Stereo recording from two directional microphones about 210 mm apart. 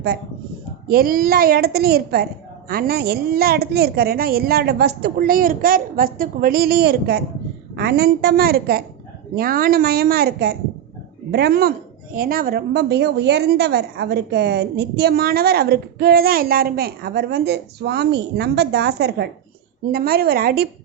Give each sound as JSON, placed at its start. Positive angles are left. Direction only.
{"t": 0.9, "sound": "a woman's voice", "side_deg": -45}